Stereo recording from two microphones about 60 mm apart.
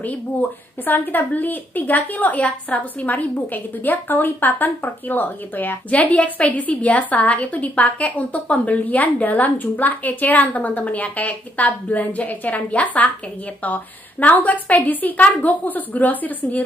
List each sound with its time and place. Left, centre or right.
0.0 s a woman's voice: left
14.2 s a woman's voice: left